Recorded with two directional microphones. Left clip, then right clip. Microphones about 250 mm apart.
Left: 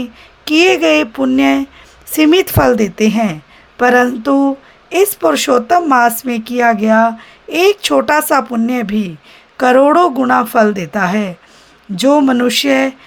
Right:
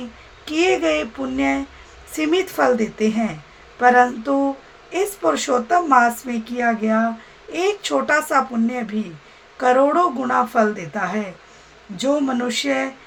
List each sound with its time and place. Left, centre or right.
0.4 s a woman's voice: left